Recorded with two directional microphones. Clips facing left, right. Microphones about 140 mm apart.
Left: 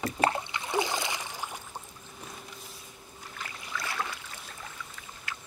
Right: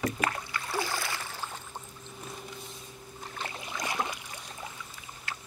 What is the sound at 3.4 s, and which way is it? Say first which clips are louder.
Boat: right 2 dB; 25° right (ahead or behind).